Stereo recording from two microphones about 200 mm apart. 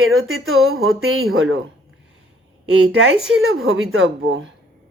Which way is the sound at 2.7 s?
75° right (ahead or behind).